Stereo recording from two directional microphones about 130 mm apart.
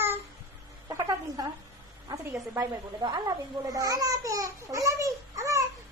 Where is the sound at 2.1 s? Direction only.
30° right (ahead or behind).